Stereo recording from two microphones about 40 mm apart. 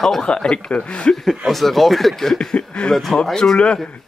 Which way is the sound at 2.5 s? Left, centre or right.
Left.